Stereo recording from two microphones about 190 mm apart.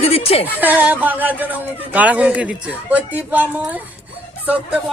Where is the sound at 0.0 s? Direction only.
30° left (ahead or behind).